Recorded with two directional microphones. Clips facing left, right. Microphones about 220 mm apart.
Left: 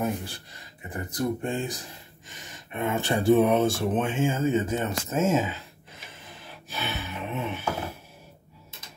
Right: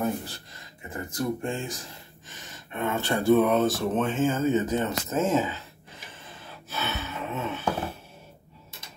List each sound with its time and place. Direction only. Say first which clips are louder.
0.0 s speech: even; 15° left (ahead or behind)
6.7 s gasp: right 1 dB; 15° left (ahead or behind)